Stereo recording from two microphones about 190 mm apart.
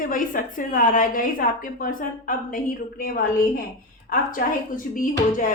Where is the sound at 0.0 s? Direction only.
45° left (ahead or behind).